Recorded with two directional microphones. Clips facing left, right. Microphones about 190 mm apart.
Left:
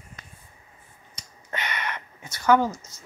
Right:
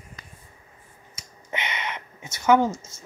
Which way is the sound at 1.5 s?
20° right (ahead or behind).